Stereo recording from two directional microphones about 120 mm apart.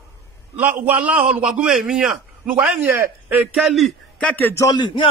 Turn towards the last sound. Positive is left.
turn(degrees=40)  # may be behind; listen again after turning